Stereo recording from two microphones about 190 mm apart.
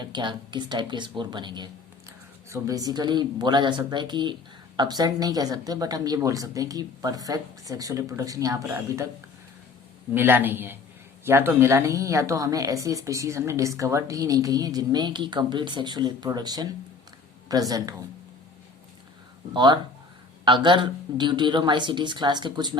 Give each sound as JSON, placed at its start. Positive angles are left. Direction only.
{"t": 0.0, "sound": "speech", "side_deg": -25}
{"t": 10.2, "sound": "a woman's voice", "side_deg": -10}
{"t": 19.5, "sound": "speech", "side_deg": -25}